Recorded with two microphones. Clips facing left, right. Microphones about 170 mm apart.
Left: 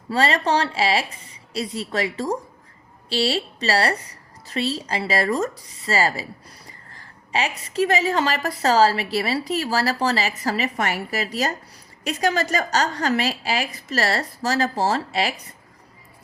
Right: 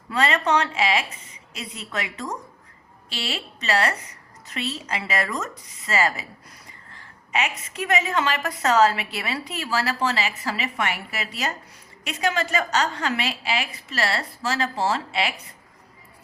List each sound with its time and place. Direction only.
0.1 s a woman's voice: 30° left (ahead or behind)